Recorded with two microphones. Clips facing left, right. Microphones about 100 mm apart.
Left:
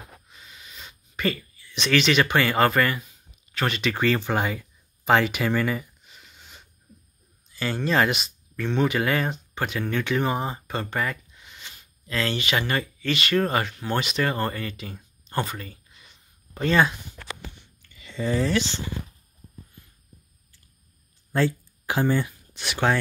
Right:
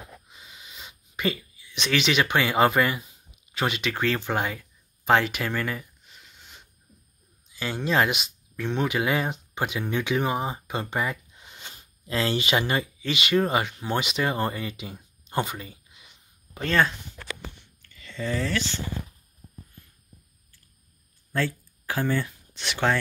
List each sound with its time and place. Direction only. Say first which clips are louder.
0.3 s a sound: even; 20° right (ahead or behind)
3.7 s speech: left 3 dB; centre (ahead or behind)
11.3 s speech: right 1 dB; 30° right (ahead or behind); by 16.2 s 10° right (ahead or behind)
16.5 s speech: left 2 dB; 10° left (ahead or behind)
17.9 s speech: left 4 dB; 15° left (ahead or behind)
21.3 s speech: left 4 dB; 30° left (ahead or behind)
21.8 s speech: left 3 dB; 20° left (ahead or behind)
22.5 s speech: left 1 dB; 5° left (ahead or behind)